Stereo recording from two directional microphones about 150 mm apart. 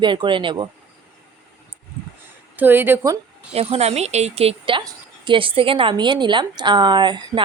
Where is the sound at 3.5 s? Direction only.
40° right (ahead or behind).